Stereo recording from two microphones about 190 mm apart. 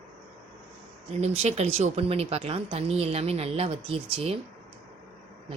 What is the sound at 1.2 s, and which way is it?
Speech, 35° right (ahead or behind).